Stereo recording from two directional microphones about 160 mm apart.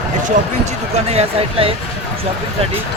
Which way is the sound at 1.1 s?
40° right (ahead or behind).